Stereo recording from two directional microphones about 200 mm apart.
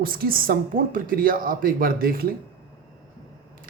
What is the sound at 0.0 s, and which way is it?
A man's voice, 45° right (ahead or behind).